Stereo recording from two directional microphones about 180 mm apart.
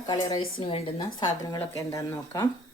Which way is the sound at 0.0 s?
20° left (ahead or behind).